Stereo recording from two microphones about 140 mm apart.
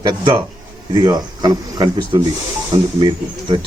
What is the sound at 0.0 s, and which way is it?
Speech, 30° right (ahead or behind).